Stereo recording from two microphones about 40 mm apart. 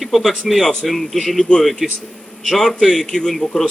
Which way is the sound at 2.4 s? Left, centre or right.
Centre.